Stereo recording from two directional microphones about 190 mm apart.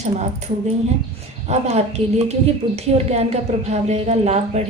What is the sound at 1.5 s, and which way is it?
A woman's voice, 35° right (ahead or behind).